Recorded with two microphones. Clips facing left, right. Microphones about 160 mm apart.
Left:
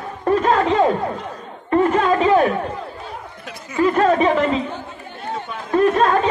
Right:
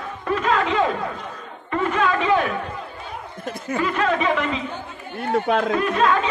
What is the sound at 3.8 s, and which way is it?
Speech, 40° left (ahead or behind).